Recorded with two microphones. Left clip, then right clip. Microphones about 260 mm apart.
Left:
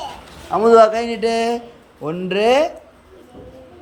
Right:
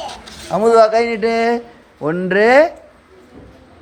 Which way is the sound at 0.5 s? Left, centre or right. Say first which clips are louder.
Even; right.